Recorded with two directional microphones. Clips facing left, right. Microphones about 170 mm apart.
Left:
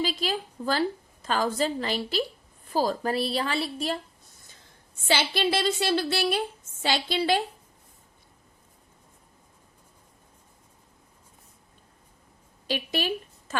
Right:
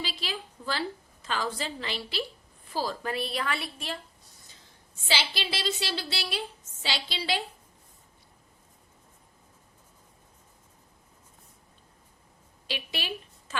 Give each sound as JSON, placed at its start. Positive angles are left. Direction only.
{"t": 0.0, "sound": "a woman's voice", "side_deg": 45}
{"t": 5.0, "sound": "a woman's voice", "side_deg": 50}
{"t": 12.6, "sound": "a woman's voice", "side_deg": 45}
{"t": 13.5, "sound": "a sound", "side_deg": 45}